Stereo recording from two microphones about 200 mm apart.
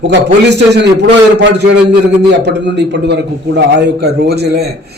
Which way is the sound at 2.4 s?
60° right (ahead or behind).